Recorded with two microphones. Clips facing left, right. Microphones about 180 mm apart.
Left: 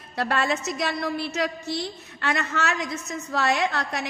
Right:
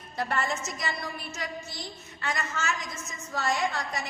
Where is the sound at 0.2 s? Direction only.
75° left (ahead or behind).